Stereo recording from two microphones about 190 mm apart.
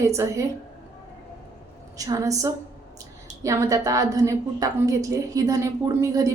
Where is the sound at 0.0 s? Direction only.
15° right (ahead or behind).